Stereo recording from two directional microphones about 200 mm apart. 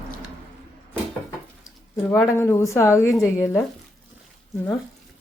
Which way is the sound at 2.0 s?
10° left (ahead or behind).